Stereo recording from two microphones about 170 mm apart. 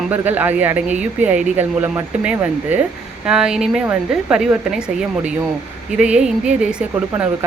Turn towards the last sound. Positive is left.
turn(degrees=-5)  # may be behind; listen again after turning